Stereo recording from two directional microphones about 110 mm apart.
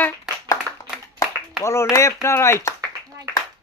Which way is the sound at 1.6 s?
25° left (ahead or behind).